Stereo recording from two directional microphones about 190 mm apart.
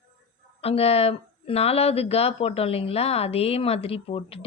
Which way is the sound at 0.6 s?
30° left (ahead or behind).